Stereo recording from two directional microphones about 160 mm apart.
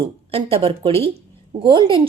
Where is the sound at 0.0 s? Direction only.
40° right (ahead or behind).